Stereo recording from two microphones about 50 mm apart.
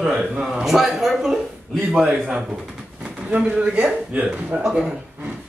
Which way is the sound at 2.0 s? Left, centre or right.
Right.